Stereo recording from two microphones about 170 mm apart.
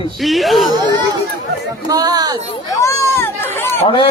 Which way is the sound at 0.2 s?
Centre (ahead or behind).